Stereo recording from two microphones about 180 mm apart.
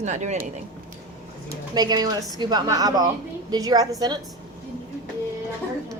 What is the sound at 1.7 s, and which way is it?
A woman's voice, 20° right (ahead or behind).